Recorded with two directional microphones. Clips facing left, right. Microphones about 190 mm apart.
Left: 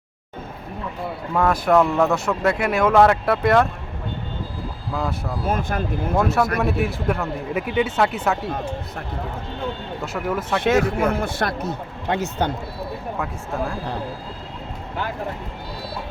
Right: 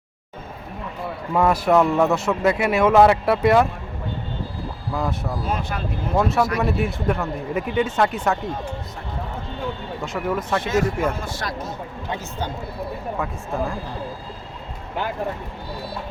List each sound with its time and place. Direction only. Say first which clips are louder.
1.3 s speech: even; 5° right (ahead or behind)
4.9 s speech: right 1 dB; centre (ahead or behind)
5.5 s speech: left 5 dB; 50° left (ahead or behind)
6.1 s speech: even; centre (ahead or behind)
10.0 s speech: even; 5° left (ahead or behind)
10.6 s speech: left 6 dB; 65° left (ahead or behind)
13.1 s speech: right 1 dB; centre (ahead or behind)